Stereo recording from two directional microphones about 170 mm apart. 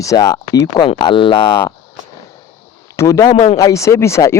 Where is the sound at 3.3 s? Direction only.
35° left (ahead or behind).